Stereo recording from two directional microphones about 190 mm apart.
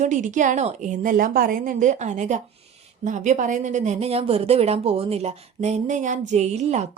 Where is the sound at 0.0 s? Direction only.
40° right (ahead or behind).